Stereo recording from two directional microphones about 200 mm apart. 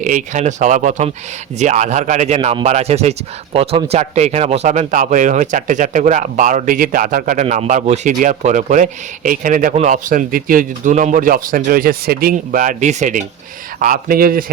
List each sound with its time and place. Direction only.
0.0 s a man's voice: 40° right (ahead or behind)